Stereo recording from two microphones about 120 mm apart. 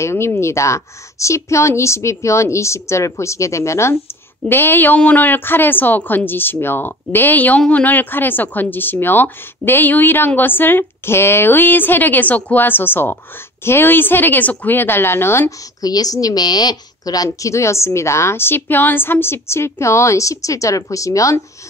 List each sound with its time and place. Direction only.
0.0 s a woman's voice: 20° left (ahead or behind)
15.8 s a woman's voice: 30° left (ahead or behind)